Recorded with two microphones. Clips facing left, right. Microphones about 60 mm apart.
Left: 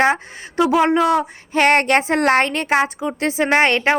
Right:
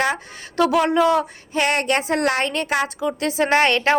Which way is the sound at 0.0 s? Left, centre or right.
Left.